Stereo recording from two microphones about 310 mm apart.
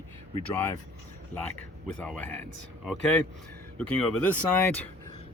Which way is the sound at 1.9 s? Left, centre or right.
Centre.